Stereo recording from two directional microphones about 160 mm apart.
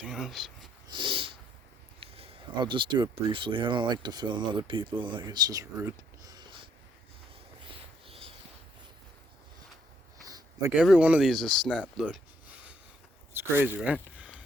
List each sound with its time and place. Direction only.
0.0 s speech: centre (ahead or behind)
0.9 s snort: 30° right (ahead or behind)
2.0 s speech: 35° right (ahead or behind)
7.7 s a sound: 35° right (ahead or behind)
10.2 s a sound: 25° right (ahead or behind)
10.8 s speech: 5° right (ahead or behind)